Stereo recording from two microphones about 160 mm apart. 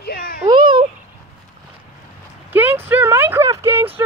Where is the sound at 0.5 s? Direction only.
30° right (ahead or behind).